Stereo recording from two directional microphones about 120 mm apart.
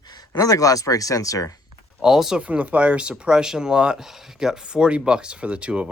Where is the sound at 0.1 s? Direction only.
35° left (ahead or behind).